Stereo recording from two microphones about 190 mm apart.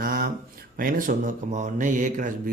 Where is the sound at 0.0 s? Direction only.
50° right (ahead or behind).